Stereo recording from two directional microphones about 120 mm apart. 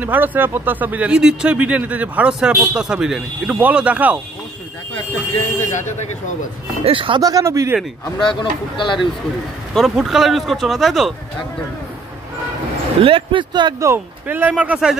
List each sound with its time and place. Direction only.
0.0 s speech: 15° right (ahead or behind)
5.7 s speech: 85° left
6.8 s speech: 50° right (ahead or behind)
7.2 s speech: 30° right (ahead or behind)
8.2 s speech: 40° left (ahead or behind)
9.8 s speech: centre (ahead or behind)
13.0 s speech: 45° right (ahead or behind)
13.7 s speech: 20° right (ahead or behind)